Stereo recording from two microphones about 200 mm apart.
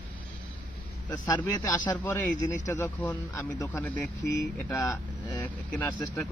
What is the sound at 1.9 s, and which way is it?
Speech, 10° left (ahead or behind).